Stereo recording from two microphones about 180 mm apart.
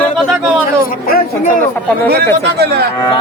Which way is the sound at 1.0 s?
55° left (ahead or behind).